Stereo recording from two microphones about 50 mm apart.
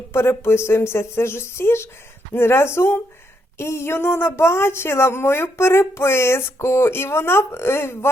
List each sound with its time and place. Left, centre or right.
0.1 s speech: left